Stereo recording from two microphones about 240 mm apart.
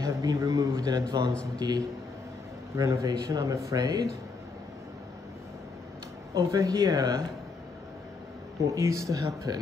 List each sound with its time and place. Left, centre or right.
0.0 s speech: centre
6.3 s speech: centre
8.6 s speech: centre